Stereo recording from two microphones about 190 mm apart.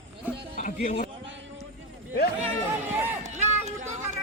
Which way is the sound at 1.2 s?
75° right (ahead or behind).